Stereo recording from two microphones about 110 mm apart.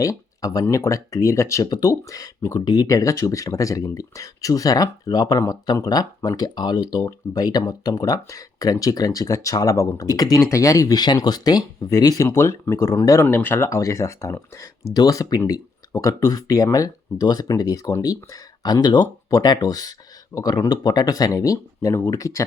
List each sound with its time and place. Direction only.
0.0 s speech: 30° left (ahead or behind)